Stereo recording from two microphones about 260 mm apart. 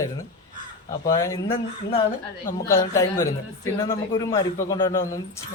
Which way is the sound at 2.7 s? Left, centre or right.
Centre.